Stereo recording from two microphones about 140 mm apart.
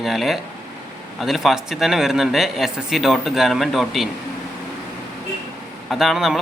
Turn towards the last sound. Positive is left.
turn(degrees=0)  # may be behind; listen again after turning